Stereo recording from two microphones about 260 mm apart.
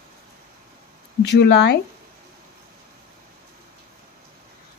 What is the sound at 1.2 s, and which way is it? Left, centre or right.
Speech, left.